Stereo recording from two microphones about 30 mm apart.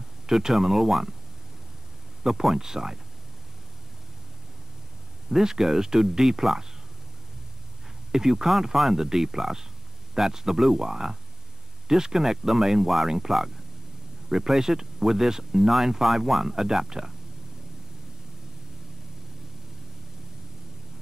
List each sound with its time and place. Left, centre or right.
0.3 s speech: centre
2.2 s speech: centre
5.3 s speech: centre
8.1 s speech: centre
14.3 s speech: centre